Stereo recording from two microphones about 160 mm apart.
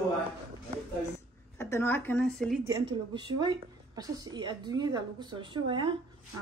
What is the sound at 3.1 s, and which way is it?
Speech, 30° right (ahead or behind).